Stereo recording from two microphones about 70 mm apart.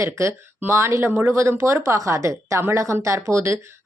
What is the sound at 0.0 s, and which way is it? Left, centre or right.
A woman's voice, right.